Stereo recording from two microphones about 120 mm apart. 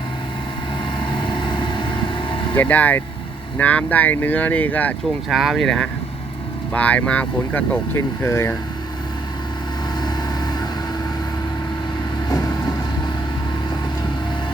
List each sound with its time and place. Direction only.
0.9 s vehicle: 40° left (ahead or behind)
2.6 s speech: 15° left (ahead or behind)
5.3 s speech: centre (ahead or behind); by 8.5 s 20° left (ahead or behind)
12.3 s vehicle: 30° left (ahead or behind)